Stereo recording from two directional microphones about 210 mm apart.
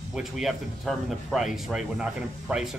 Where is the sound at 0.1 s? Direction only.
Centre (ahead or behind).